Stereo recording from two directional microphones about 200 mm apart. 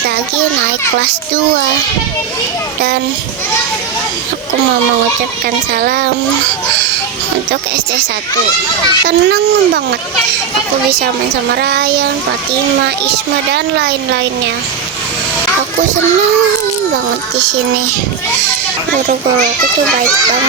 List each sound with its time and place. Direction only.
5.7 s a child's voice: 50° right (ahead or behind)
9.0 s speech: 55° right (ahead or behind)
11.5 s speech: 55° right (ahead or behind)
13.5 s speech: 55° right (ahead or behind)